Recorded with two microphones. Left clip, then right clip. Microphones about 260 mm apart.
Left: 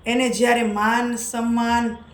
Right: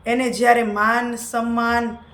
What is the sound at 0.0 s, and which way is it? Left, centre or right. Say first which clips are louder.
A man's voice: right 2 dB; centre.